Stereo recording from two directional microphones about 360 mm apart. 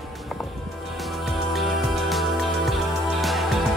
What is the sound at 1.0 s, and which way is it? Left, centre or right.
Music, centre.